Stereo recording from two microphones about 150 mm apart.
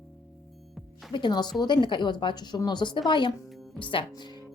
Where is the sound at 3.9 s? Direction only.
30° left (ahead or behind).